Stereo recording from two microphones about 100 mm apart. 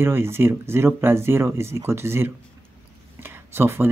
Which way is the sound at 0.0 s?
25° right (ahead or behind).